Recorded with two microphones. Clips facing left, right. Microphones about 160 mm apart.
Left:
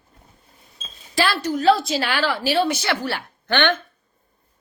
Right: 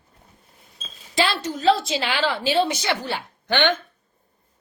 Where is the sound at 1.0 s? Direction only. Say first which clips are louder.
Left 1 dB; 20° right (ahead or behind).